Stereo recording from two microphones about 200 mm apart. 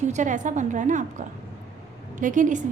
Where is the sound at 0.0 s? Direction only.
35° right (ahead or behind).